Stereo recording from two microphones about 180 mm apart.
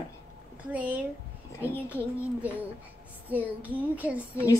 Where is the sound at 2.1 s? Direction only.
10° right (ahead or behind).